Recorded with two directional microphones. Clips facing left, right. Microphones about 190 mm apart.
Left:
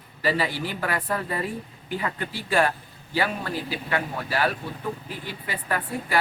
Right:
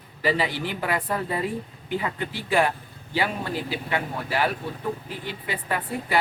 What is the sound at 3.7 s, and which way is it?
A man's voice, 20° right (ahead or behind).